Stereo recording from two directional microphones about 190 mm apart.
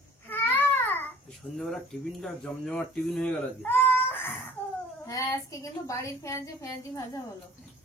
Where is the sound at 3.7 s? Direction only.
10° left (ahead or behind).